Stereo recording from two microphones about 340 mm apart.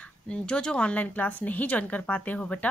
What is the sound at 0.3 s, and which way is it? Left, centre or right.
Speech, centre.